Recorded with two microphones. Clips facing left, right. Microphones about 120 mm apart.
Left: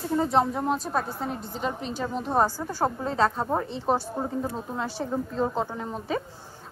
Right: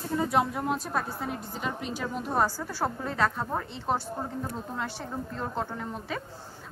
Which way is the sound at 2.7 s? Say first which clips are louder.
Left 4 dB; 30° left (ahead or behind).